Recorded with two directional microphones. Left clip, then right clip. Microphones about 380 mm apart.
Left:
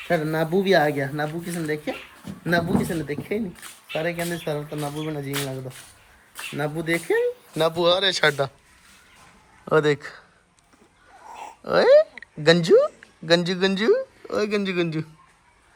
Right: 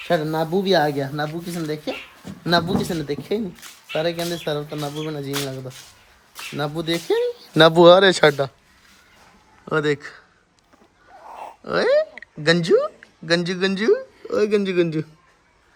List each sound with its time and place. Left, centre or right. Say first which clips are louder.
0.1 s speech: right 2 dB; centre
7.5 s speech: right 10 dB; right
9.6 s speech: left 1 dB; centre
11.3 s a sound: right 2 dB; centre
11.6 s speech: left 3 dB; centre